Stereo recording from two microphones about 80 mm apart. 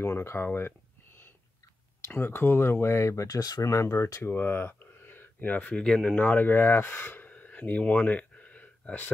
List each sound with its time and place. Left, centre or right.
0.0 s speech: left
3.6 s speech: left; by 6.1 s centre
6.1 s speech: left